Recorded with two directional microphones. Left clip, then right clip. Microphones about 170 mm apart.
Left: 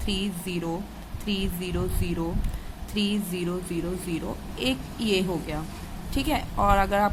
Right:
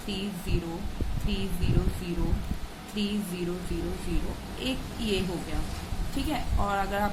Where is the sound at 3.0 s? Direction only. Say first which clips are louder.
Left 5 dB; 50° left (ahead or behind).